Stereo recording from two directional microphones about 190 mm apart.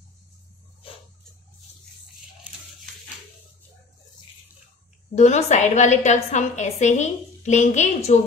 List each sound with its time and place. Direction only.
5.1 s a woman's voice: 35° left (ahead or behind)